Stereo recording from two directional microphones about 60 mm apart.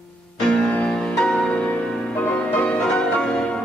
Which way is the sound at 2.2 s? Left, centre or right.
Left.